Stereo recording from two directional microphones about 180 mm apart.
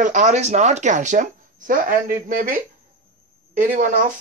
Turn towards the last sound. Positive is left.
turn(degrees=-50)  # may be behind; listen again after turning